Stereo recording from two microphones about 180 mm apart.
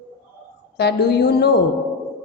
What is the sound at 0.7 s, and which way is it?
Speech, 65° left (ahead or behind).